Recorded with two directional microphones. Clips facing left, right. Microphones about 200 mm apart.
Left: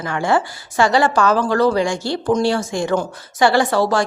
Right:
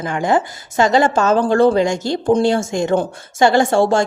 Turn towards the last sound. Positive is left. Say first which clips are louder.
# right 3 dB
turn(degrees=-25)  # may be behind; listen again after turning